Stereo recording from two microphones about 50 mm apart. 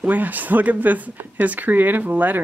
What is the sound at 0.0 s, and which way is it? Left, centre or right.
Speech, right.